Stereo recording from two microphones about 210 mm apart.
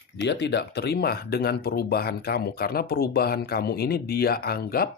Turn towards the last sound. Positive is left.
turn(degrees=45)  # may be behind; listen again after turning